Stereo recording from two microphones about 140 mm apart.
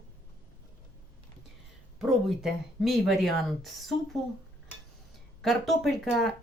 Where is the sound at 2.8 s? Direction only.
Centre (ahead or behind).